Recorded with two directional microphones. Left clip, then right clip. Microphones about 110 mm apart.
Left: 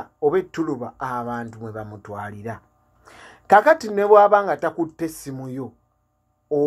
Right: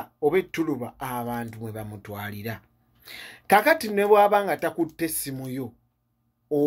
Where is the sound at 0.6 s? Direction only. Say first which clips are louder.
Left 3 dB; 20° right (ahead or behind).